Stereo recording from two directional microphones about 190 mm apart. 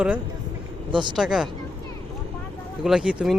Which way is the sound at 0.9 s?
25° right (ahead or behind).